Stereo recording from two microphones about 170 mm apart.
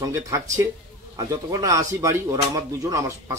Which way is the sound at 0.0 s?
20° right (ahead or behind).